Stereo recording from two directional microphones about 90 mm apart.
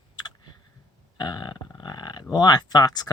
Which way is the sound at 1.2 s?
55° left (ahead or behind).